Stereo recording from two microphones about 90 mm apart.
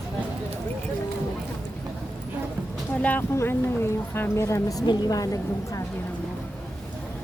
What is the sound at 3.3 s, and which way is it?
A woman's voice, 30° left (ahead or behind).